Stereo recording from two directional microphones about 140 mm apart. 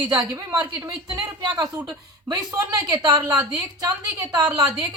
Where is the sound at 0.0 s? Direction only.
35° right (ahead or behind).